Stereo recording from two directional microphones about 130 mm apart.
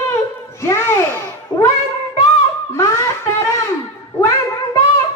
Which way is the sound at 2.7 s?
20° left (ahead or behind).